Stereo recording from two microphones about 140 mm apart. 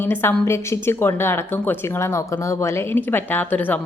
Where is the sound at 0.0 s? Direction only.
15° left (ahead or behind).